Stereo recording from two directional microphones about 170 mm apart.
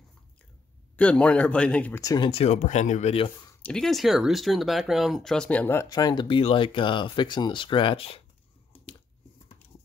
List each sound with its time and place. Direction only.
0.9 s speech: 10° left (ahead or behind)
2.0 s speech: 25° left (ahead or behind); by 3.3 s 40° left (ahead or behind)
3.6 s speech: 5° left (ahead or behind); by 8.2 s 35° left (ahead or behind)